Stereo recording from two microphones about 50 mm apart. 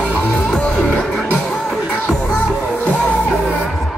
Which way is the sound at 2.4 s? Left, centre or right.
Right.